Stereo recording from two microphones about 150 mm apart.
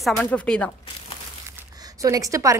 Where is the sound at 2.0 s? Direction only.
20° right (ahead or behind).